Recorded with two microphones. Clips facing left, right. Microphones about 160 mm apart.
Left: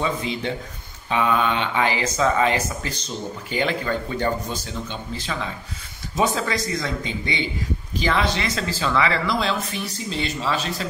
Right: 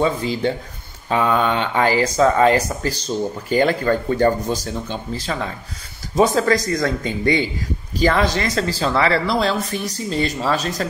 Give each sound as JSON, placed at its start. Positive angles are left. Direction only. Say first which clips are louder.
{"t": 0.0, "sound": "speech", "louder": "right 6 dB", "side_deg": -35}